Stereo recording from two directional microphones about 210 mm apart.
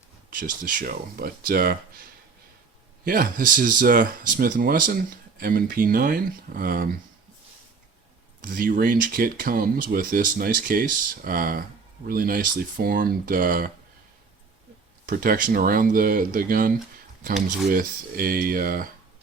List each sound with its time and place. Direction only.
0.3 s speech: 40° right (ahead or behind)
3.0 s speech: 45° right (ahead or behind)
8.4 s speech: 40° right (ahead or behind)
15.0 s speech: 45° right (ahead or behind)